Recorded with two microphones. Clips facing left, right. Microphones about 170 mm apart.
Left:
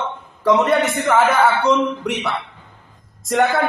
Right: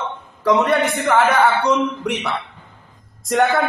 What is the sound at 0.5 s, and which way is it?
A man's voice, centre (ahead or behind).